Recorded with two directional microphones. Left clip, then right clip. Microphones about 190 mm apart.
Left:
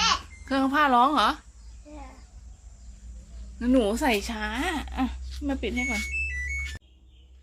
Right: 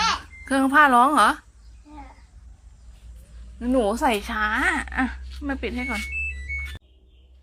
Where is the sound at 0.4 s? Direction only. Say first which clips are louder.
Right 6 dB; 20° right (ahead or behind).